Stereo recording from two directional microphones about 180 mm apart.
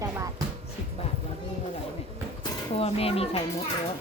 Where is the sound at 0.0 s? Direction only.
15° right (ahead or behind).